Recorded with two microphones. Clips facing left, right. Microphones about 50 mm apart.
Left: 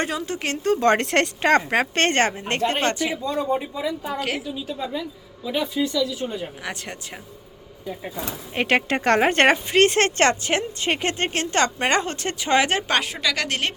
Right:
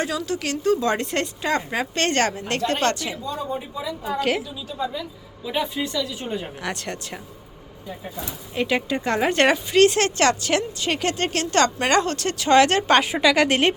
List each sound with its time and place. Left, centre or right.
0.0 s speech: left
2.8 s speech: centre
3.2 s speech: left
4.2 s a woman's voice: centre
5.8 s speech: right
6.6 s a woman's voice: centre
8.2 s speech: left; by 12.8 s centre
12.9 s a woman's voice: centre
13.1 s a woman's voice: centre